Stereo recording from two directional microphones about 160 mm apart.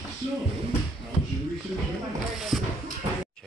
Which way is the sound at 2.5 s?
Centre (ahead or behind).